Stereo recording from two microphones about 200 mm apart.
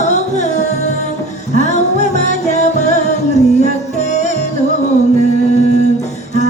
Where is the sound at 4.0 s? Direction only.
35° left (ahead or behind).